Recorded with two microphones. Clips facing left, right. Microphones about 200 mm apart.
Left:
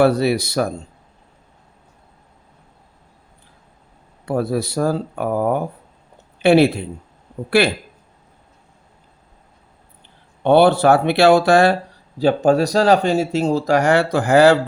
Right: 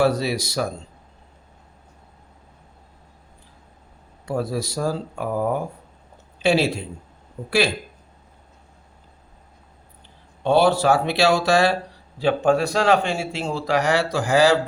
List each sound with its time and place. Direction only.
0.0 s speech: 60° left (ahead or behind)
4.3 s speech: 60° left (ahead or behind)
10.4 s speech: 60° left (ahead or behind)
12.2 s speech: 40° left (ahead or behind); by 14.5 s 60° left (ahead or behind)